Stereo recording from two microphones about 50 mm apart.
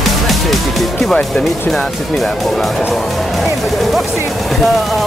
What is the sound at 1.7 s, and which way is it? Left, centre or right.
Speech, centre.